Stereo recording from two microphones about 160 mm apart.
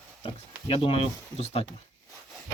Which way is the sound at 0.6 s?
35° left (ahead or behind).